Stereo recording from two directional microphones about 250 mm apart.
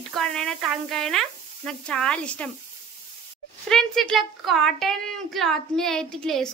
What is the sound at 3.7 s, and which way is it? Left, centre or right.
A woman's voice, centre.